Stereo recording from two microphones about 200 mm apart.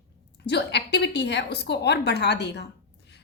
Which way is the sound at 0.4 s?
55° left (ahead or behind).